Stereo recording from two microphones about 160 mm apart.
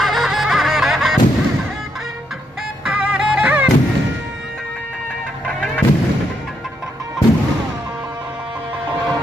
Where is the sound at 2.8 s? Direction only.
10° right (ahead or behind).